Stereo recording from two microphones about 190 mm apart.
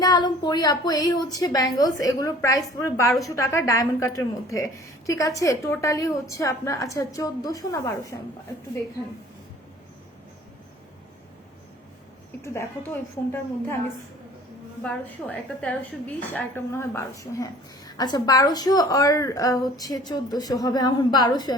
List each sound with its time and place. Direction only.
0.0 s a woman's voice: 20° left (ahead or behind)
12.4 s a woman's voice: 15° left (ahead or behind)
14.8 s a woman's voice: 5° left (ahead or behind)